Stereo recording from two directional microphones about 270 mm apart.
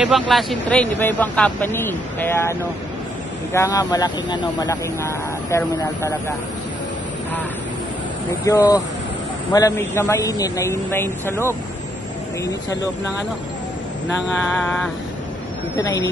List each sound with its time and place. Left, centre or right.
0.0 s speech: centre
3.5 s speech: centre
8.5 s speech: centre